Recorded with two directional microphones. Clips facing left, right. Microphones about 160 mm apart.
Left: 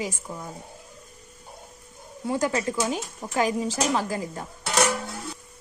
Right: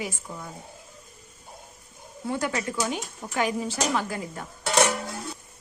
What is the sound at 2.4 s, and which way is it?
Speech, 30° left (ahead or behind).